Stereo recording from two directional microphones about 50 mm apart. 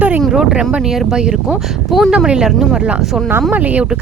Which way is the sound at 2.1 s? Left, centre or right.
Centre.